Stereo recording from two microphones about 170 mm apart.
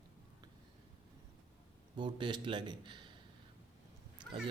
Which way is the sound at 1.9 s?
25° right (ahead or behind).